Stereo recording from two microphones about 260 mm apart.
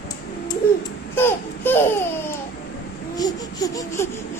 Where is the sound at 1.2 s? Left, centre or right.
Centre.